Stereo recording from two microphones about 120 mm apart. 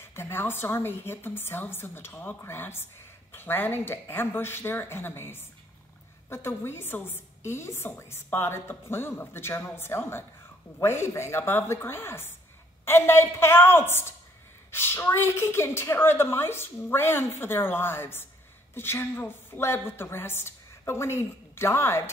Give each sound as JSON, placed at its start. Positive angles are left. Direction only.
{"t": 0.0, "sound": "a woman's voice", "side_deg": 20}